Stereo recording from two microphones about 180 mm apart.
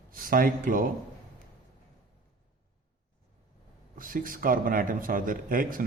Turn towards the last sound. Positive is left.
turn(degrees=-50)  # may be behind; listen again after turning